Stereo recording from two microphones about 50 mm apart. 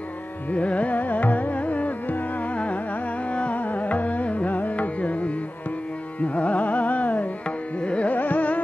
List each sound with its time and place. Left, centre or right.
0.5 s carnatic music: left
7.8 s music: left
8.2 s carnatic music: left